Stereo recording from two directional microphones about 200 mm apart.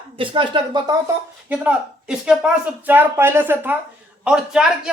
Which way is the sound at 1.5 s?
5° right (ahead or behind).